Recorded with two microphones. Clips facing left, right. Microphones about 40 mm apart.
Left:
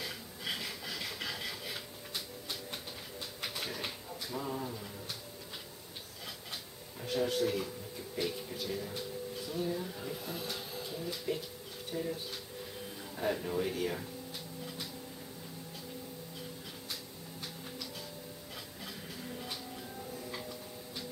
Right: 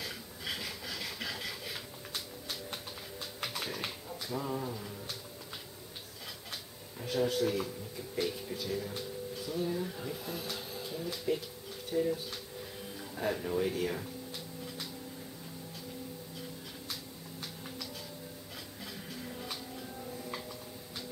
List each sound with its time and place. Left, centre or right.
0.0 s a sound: centre
7.0 s speech: centre
8.5 s speech: centre
19.2 s music: centre